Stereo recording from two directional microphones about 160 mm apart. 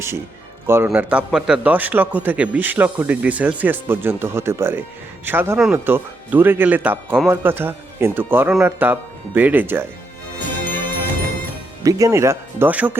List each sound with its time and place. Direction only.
0.9 s a man's voice: 5° right (ahead or behind)
10.3 s music: 10° left (ahead or behind)
11.8 s a man's voice: 20° right (ahead or behind)